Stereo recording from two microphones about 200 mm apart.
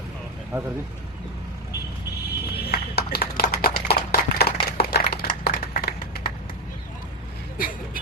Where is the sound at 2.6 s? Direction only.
50° left (ahead or behind).